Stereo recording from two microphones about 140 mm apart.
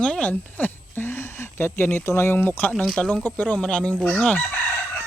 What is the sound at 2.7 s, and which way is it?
Chicken, 5° left (ahead or behind).